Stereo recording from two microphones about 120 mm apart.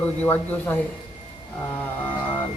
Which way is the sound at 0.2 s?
15° left (ahead or behind).